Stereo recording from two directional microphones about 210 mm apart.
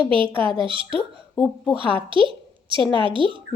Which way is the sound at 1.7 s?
25° right (ahead or behind).